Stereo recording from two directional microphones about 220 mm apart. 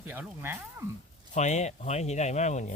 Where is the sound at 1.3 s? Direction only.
30° left (ahead or behind).